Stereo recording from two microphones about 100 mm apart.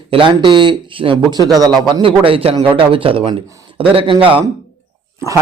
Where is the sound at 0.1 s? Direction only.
55° right (ahead or behind).